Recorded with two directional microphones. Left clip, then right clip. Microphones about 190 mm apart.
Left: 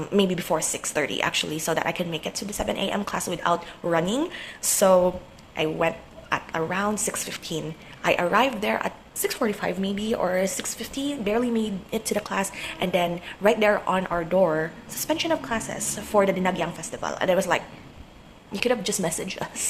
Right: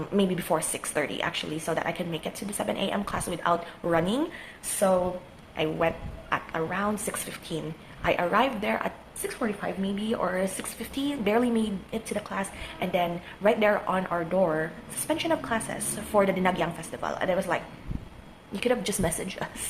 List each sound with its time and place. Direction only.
0.1 s a woman's voice: 15° left (ahead or behind)
5.6 s a woman's voice: 15° left (ahead or behind)
11.9 s a woman's voice: 20° left (ahead or behind)